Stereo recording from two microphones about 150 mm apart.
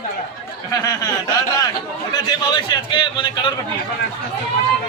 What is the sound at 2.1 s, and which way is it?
A man's voice, 30° left (ahead or behind).